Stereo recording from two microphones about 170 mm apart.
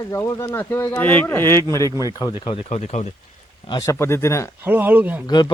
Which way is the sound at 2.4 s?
40° left (ahead or behind).